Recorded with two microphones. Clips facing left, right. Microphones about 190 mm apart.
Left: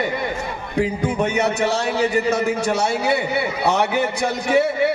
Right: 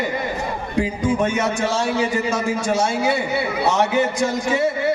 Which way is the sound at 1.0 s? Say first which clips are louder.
Even; 65° left (ahead or behind).